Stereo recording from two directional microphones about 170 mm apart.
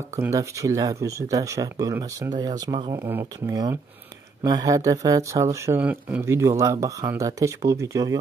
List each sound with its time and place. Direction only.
0.1 s speech: 20° right (ahead or behind)